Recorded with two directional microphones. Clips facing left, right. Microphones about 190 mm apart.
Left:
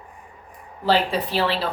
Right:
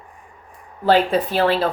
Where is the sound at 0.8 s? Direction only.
50° right (ahead or behind).